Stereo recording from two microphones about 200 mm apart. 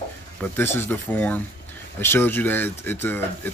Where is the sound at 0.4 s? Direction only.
10° left (ahead or behind).